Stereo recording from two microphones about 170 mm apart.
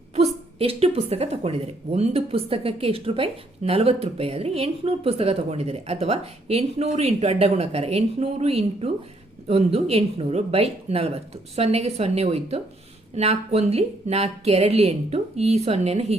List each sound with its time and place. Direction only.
0.6 s a woman's voice: 35° right (ahead or behind)